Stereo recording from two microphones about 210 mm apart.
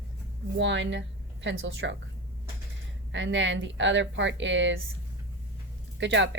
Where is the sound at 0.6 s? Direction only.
60° right (ahead or behind).